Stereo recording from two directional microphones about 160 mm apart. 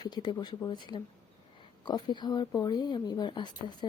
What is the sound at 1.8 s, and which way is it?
A woman's voice, 25° left (ahead or behind).